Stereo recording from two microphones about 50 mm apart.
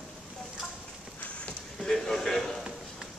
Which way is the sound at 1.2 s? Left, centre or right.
Left.